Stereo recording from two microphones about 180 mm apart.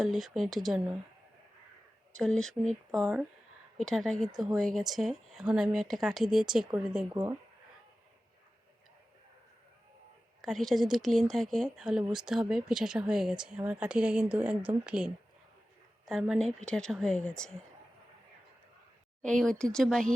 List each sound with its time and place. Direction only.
0.0 s speech: centre (ahead or behind)
2.1 s speech: 5° left (ahead or behind)
7.1 s speech: 20° right (ahead or behind)
10.4 s a woman's voice: centre (ahead or behind)
19.2 s speech: 5° left (ahead or behind)